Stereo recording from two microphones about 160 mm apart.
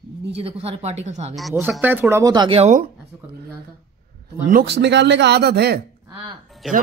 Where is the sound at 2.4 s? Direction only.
40° right (ahead or behind).